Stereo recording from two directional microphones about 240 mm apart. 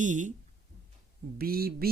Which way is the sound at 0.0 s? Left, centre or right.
Right.